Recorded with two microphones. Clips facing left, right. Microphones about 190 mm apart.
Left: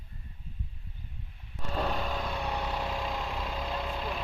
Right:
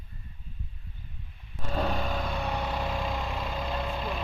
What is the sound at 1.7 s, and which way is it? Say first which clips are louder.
Vehicle: right 2 dB; 5° right (ahead or behind).